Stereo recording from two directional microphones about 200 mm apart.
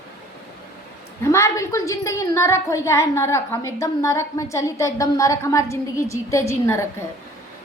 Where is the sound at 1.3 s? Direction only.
15° left (ahead or behind).